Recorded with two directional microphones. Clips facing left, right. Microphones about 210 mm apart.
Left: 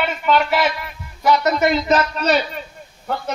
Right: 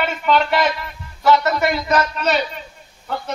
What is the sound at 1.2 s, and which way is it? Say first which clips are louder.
Speech: even; 20° left (ahead or behind).